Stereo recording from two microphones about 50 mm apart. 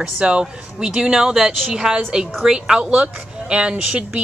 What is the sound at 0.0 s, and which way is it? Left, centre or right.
Speech, right.